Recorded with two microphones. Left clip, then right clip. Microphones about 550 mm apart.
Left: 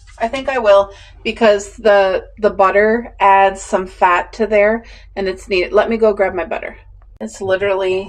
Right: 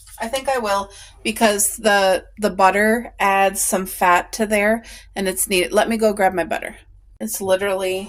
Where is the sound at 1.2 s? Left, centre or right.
Right.